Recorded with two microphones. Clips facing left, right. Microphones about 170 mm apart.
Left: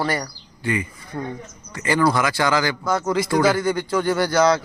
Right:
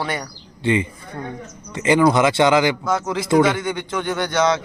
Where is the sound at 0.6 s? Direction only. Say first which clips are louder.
Right 5 dB; 25° right (ahead or behind).